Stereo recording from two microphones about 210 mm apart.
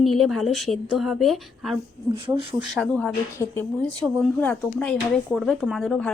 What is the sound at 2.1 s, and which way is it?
Speech, 25° right (ahead or behind).